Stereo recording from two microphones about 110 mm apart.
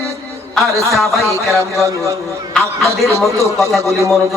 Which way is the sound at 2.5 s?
5° left (ahead or behind).